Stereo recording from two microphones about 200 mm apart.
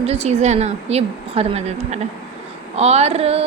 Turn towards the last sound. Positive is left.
turn(degrees=-30)  # may be behind; listen again after turning